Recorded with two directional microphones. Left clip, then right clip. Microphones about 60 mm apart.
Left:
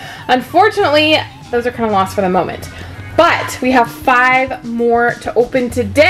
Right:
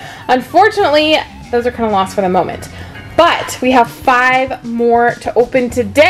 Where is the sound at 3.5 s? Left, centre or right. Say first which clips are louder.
Right 2 dB; right.